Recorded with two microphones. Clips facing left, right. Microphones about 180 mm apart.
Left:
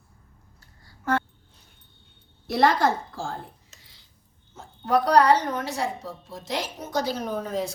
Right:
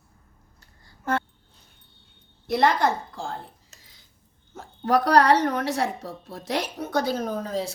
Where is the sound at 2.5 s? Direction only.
20° right (ahead or behind).